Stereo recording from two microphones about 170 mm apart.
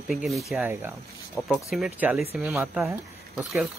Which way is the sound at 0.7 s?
15° right (ahead or behind).